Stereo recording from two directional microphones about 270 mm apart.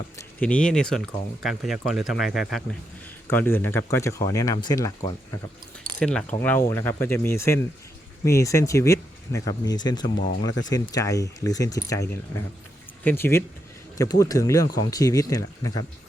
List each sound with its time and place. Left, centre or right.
0.2 s speech: centre